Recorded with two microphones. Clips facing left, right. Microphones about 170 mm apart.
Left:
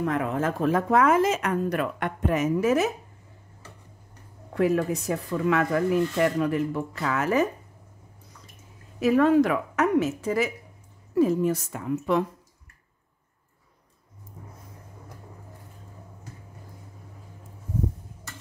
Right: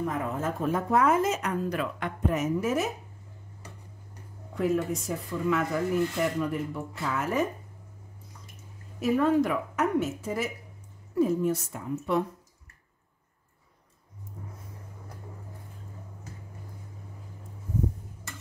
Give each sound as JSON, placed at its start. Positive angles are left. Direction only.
{"t": 0.0, "sound": "speech", "side_deg": 85}
{"t": 1.6, "sound": "speech", "side_deg": 60}
{"t": 4.6, "sound": "speech", "side_deg": 65}
{"t": 9.0, "sound": "speech", "side_deg": 90}